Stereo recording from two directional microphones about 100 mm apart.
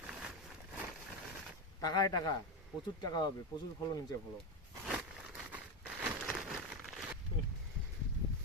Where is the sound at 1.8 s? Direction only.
40° left (ahead or behind).